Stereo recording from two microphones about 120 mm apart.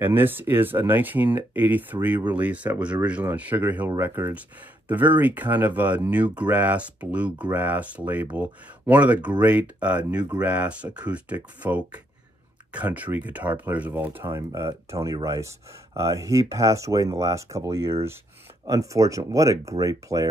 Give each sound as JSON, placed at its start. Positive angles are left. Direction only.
{"t": 0.0, "sound": "speech", "side_deg": -15}